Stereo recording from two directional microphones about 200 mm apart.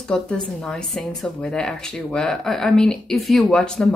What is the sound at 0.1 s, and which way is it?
Speech, 5° left (ahead or behind).